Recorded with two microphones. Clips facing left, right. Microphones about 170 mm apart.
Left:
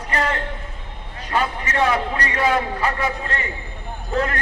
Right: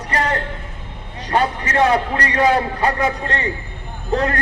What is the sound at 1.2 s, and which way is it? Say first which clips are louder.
A man's voice: right 4 dB; 35° right (ahead or behind).